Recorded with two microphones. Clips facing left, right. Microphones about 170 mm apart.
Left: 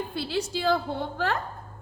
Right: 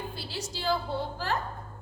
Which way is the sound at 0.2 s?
60° left (ahead or behind).